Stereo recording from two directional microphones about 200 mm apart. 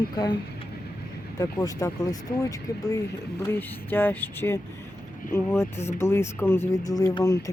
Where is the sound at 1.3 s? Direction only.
15° left (ahead or behind).